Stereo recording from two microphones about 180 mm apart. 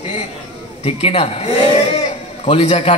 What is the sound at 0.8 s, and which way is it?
A man's voice, 35° left (ahead or behind).